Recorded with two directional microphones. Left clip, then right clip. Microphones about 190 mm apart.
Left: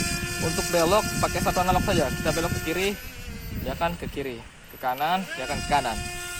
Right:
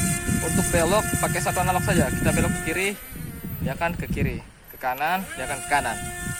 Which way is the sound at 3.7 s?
20° left (ahead or behind).